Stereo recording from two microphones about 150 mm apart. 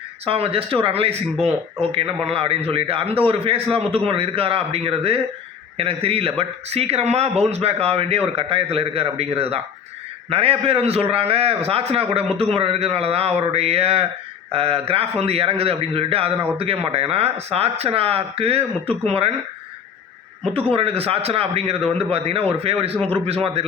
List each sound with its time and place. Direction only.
0.3 s a man's voice: 40° right (ahead or behind)
20.7 s a man's voice: 40° right (ahead or behind)